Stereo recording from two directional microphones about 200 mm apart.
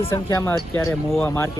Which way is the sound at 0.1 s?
15° left (ahead or behind).